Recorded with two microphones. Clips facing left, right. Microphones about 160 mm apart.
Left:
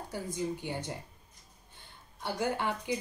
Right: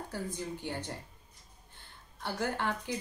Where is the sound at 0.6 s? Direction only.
15° left (ahead or behind).